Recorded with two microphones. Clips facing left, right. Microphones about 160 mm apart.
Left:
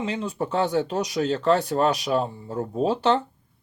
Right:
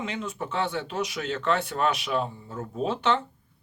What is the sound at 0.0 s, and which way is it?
Speech, 30° left (ahead or behind).